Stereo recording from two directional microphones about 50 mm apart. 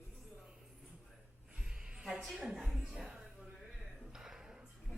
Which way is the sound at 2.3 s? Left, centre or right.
Centre.